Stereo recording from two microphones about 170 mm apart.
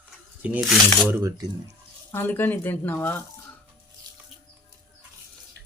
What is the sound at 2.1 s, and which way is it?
Speech, 15° left (ahead or behind).